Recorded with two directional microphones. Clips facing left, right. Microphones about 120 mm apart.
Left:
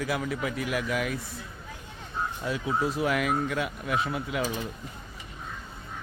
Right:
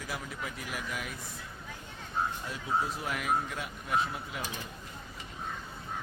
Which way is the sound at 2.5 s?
90° left.